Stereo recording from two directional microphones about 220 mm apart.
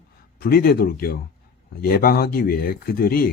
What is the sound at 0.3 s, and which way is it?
Speech, 45° left (ahead or behind).